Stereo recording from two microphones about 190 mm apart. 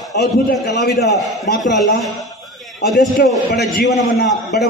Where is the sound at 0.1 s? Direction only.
60° left (ahead or behind).